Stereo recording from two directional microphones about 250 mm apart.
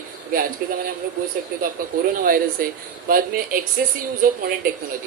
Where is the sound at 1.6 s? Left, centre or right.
Right.